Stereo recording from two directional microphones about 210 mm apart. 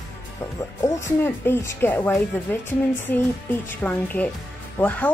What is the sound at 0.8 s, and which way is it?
A woman's voice, 15° left (ahead or behind).